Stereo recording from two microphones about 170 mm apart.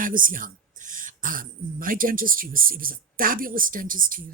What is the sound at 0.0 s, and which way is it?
Speech, 55° right (ahead or behind).